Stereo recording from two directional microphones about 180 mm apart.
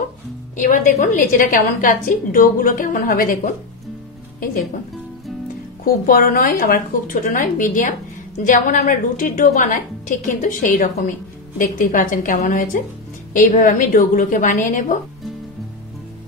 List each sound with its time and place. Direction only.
0.6 s a woman's voice: 45° left (ahead or behind)
5.9 s a woman's voice: 55° left (ahead or behind)